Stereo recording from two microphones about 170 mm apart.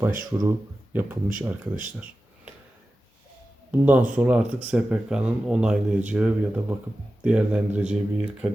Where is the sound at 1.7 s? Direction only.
50° right (ahead or behind).